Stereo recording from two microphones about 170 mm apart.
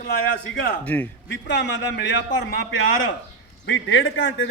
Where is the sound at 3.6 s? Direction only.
90° left.